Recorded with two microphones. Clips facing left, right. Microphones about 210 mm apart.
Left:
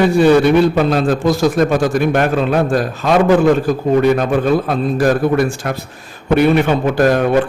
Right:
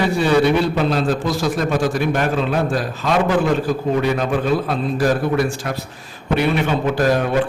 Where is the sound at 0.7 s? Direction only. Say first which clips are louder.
Left 4 dB; 50° left (ahead or behind).